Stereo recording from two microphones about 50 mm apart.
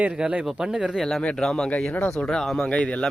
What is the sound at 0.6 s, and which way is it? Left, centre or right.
Speech, centre.